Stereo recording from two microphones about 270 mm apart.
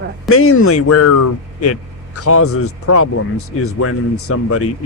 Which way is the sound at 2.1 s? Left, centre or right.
Left.